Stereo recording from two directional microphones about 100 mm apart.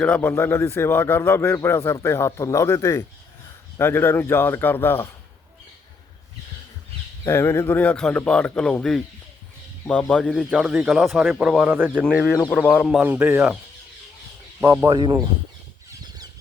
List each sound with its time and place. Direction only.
0.0 s a man's voice: 15° left (ahead or behind)
7.3 s speech: 25° left (ahead or behind); by 9.0 s 5° left (ahead or behind)
10.0 s speech: 10° left (ahead or behind)
10.3 s speech: centre (ahead or behind)
11.6 s speech: 20° right (ahead or behind)
12.2 s speech: 10° left (ahead or behind)
13.0 s speech: 15° right (ahead or behind)
14.6 s speech: 20° right (ahead or behind)
14.8 s speech: 50° right (ahead or behind)